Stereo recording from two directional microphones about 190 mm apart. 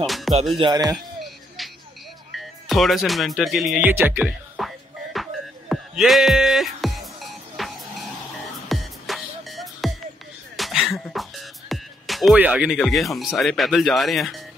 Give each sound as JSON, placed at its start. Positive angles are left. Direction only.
{"t": 0.0, "sound": "music", "side_deg": 0}
{"t": 0.6, "sound": "speech", "side_deg": -20}
{"t": 1.6, "sound": "music", "side_deg": 0}
{"t": 10.5, "sound": "speech", "side_deg": 0}